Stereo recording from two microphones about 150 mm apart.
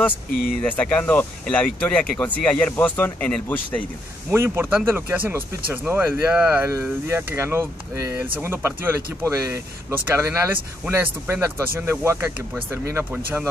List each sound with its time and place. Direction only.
0.6 s speech: 10° left (ahead or behind)
4.3 s speech: 15° right (ahead or behind)